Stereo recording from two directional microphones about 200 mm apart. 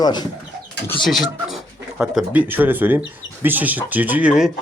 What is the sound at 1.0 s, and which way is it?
Speech, centre (ahead or behind).